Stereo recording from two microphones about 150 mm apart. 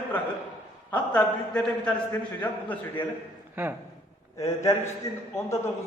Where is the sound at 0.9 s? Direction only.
10° left (ahead or behind).